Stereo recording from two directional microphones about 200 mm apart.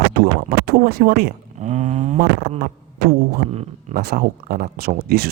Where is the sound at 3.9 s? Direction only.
50° right (ahead or behind).